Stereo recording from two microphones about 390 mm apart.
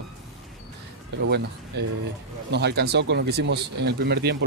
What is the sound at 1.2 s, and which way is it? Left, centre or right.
Speech, right.